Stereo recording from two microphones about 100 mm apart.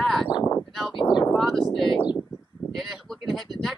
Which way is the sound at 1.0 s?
50° left (ahead or behind).